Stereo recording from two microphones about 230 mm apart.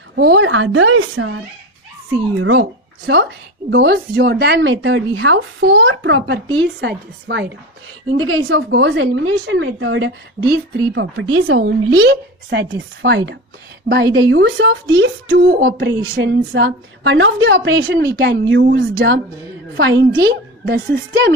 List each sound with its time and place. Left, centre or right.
0.1 s a woman's voice: right
2.3 s a child's voice: right
2.6 s speech: right
8.2 s a woman's voice: right